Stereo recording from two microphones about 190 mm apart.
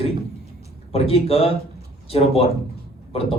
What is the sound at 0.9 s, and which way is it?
A man's voice, 30° left (ahead or behind).